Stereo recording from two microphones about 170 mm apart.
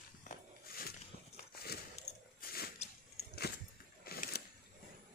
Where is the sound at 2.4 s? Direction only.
65° left (ahead or behind).